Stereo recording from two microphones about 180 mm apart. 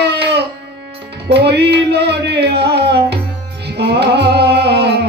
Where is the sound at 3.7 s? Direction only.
65° right (ahead or behind).